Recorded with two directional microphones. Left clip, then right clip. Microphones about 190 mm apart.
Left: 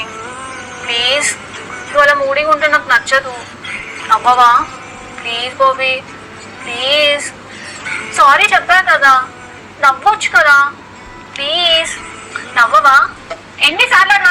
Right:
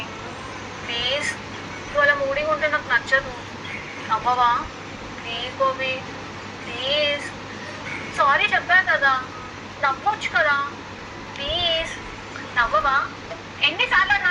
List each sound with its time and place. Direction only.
0.9 s a man's voice: 40° left (ahead or behind)
3.7 s a sound: 40° left (ahead or behind)
5.2 s a man's voice: 40° left (ahead or behind)